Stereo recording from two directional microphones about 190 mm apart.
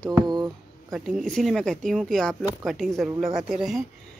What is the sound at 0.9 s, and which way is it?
Speech, centre (ahead or behind).